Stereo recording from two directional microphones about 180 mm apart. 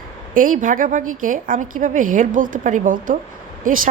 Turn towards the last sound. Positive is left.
turn(degrees=-50)  # may be behind; listen again after turning